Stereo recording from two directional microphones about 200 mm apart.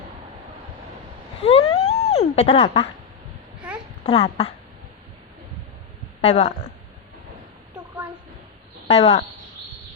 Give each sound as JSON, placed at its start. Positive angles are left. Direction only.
{"t": 1.4, "sound": "a sound", "side_deg": 30}
{"t": 4.0, "sound": "a child's voice", "side_deg": 30}
{"t": 6.2, "sound": "a child's voice", "side_deg": 35}
{"t": 8.9, "sound": "a child's voice", "side_deg": 30}